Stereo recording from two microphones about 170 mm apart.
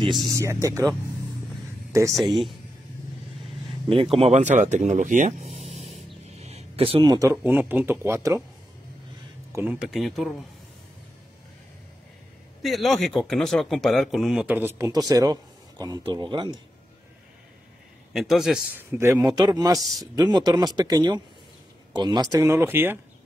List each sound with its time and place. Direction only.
0.2 s a man's voice: 20° right (ahead or behind)
3.9 s speech: 35° right (ahead or behind)
6.3 s a sound: 40° right (ahead or behind)
7.2 s a man's voice: 15° right (ahead or behind)
9.5 s speech: 10° right (ahead or behind)
12.6 s a man's voice: centre (ahead or behind); by 16.5 s 25° right (ahead or behind)
18.1 s a man's voice: centre (ahead or behind)